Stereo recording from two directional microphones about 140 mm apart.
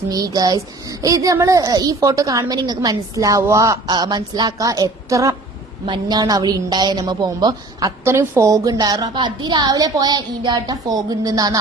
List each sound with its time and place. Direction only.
0.1 s a woman's voice: 25° right (ahead or behind)